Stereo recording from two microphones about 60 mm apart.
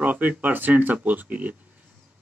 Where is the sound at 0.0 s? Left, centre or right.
Right.